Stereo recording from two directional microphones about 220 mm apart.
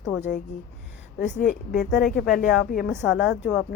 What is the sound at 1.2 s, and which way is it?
A woman's voice, 35° left (ahead or behind).